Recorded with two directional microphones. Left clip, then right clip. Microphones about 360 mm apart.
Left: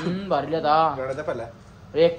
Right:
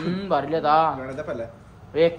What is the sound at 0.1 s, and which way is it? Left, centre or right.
Speech, centre.